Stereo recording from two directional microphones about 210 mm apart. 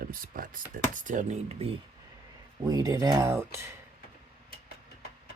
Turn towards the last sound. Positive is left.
turn(degrees=-15)  # may be behind; listen again after turning